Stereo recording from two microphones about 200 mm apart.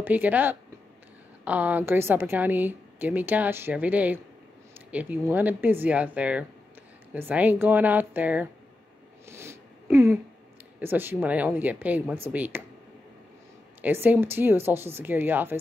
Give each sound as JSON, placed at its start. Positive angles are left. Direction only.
{"t": 0.0, "sound": "a woman's voice", "side_deg": -10}
{"t": 5.3, "sound": "a woman's voice", "side_deg": -10}
{"t": 9.3, "sound": "a sound", "side_deg": -10}
{"t": 10.8, "sound": "a woman's voice", "side_deg": -10}
{"t": 13.7, "sound": "a woman's voice", "side_deg": -10}